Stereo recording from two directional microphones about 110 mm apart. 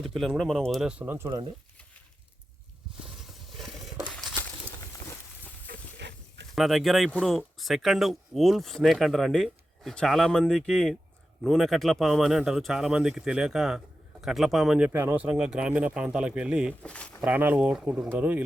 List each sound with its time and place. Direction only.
0.0 s speech: centre (ahead or behind)
1.0 s speech: 20° right (ahead or behind)
3.5 s a sound: centre (ahead or behind)
4.1 s a sound: 10° left (ahead or behind)
6.6 s speech: centre (ahead or behind)
14.8 s speech: 20° right (ahead or behind)
16.8 s speech: 10° left (ahead or behind)
17.2 s speech: 15° right (ahead or behind)